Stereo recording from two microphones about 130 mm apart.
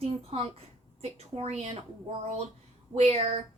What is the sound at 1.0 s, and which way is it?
Speech, 55° right (ahead or behind).